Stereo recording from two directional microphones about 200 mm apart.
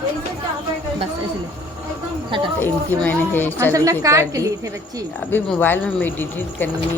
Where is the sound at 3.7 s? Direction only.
15° right (ahead or behind).